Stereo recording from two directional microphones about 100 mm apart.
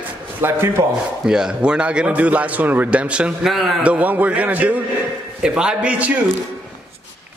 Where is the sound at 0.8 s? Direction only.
25° right (ahead or behind).